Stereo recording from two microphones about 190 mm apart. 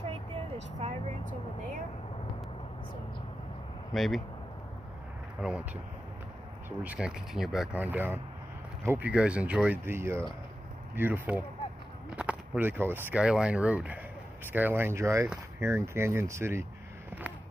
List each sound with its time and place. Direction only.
0.8 s vehicle: 30° right (ahead or behind)
3.9 s speech: centre (ahead or behind)
5.4 s speech: 5° right (ahead or behind)
6.8 s speech: 5° right (ahead or behind)